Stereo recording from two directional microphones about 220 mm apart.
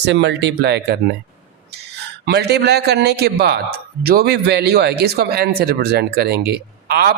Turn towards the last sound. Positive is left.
turn(degrees=-45)  # may be behind; listen again after turning